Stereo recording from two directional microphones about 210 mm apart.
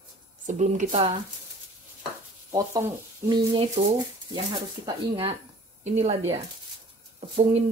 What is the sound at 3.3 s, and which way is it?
Speech, 25° right (ahead or behind).